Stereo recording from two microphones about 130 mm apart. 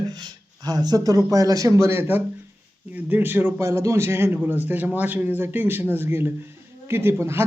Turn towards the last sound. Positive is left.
turn(degrees=-20)  # may be behind; listen again after turning